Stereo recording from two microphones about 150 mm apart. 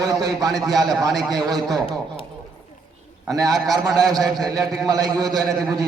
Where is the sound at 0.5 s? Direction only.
Centre (ahead or behind).